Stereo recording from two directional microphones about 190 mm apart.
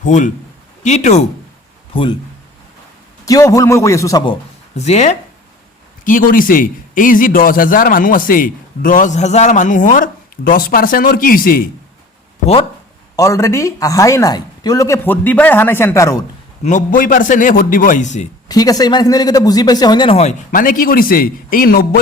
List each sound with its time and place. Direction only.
0.0 s a man's voice: 40° left (ahead or behind)
3.2 s speech: 15° left (ahead or behind)
4.8 s a man's voice: 35° left (ahead or behind)
13.1 s speech: 15° left (ahead or behind)
16.6 s a man's voice: 45° left (ahead or behind)
18.4 s a man's voice: 20° left (ahead or behind)
20.5 s a man's voice: 45° left (ahead or behind)